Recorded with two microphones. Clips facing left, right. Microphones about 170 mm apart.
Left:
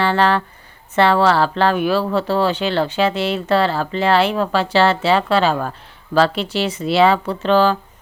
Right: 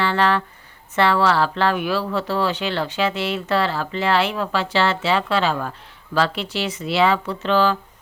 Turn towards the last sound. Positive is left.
turn(degrees=35)  # may be behind; listen again after turning